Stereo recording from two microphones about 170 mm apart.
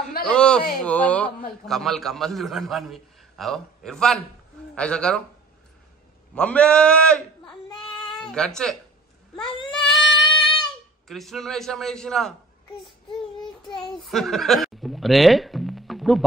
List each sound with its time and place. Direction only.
0.2 s a man's voice: 5° left (ahead or behind)
6.3 s a man's voice: 5° left (ahead or behind)
9.3 s a sound: 5° left (ahead or behind)
10.1 s child singing: 30° left (ahead or behind)
11.1 s a man's voice: centre (ahead or behind)
13.7 s a woman's voice: centre (ahead or behind)